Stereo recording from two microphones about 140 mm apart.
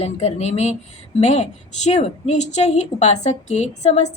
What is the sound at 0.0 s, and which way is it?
A woman's voice, 50° left (ahead or behind).